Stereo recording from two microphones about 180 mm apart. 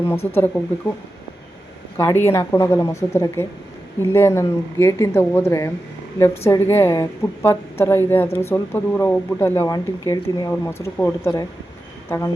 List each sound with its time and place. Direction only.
0.3 s a woman's voice: 10° left (ahead or behind)
2.0 s a woman's voice: 15° left (ahead or behind)